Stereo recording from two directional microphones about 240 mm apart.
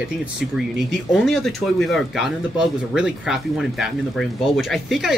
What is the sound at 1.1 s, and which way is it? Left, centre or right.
Speech, centre.